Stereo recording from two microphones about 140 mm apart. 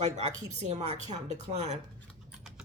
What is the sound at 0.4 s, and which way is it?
Speech, 55° right (ahead or behind).